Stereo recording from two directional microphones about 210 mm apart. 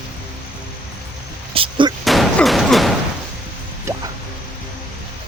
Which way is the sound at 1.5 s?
25° right (ahead or behind).